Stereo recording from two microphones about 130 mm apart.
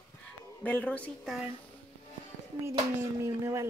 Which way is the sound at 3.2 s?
20° right (ahead or behind).